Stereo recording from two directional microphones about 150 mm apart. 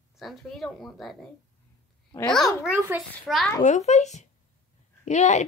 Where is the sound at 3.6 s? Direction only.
50° left (ahead or behind).